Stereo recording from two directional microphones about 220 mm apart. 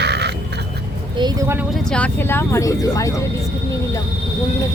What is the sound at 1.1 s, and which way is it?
Speech, 15° right (ahead or behind).